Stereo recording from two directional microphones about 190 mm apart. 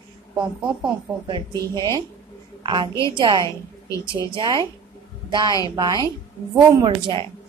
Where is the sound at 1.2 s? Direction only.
20° right (ahead or behind).